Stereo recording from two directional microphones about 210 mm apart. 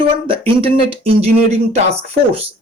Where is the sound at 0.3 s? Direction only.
25° right (ahead or behind).